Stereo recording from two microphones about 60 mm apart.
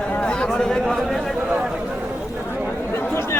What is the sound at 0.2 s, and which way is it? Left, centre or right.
Speech, centre.